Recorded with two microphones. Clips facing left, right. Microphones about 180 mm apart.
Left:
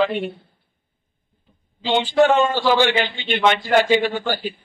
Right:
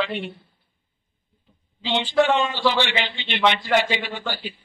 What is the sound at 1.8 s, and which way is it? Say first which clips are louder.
A man's voice: left 4 dB; 50° left (ahead or behind).